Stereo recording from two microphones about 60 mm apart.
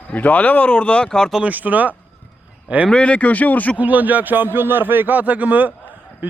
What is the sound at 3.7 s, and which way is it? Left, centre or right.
A man's voice, right.